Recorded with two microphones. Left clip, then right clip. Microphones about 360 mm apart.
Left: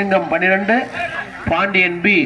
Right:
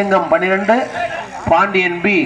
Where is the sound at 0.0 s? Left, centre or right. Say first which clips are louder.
Right 2 dB; centre.